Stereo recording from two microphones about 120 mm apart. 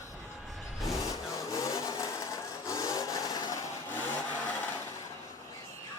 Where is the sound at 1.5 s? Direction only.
25° left (ahead or behind).